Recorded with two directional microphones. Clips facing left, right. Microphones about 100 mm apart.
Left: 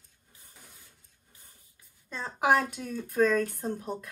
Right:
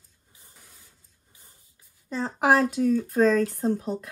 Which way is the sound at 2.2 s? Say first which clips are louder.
Right 4 dB; 50° right (ahead or behind).